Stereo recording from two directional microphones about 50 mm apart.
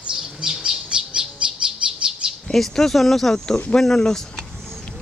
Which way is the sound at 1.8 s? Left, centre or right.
Right.